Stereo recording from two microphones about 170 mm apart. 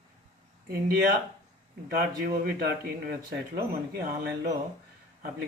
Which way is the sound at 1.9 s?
60° right (ahead or behind).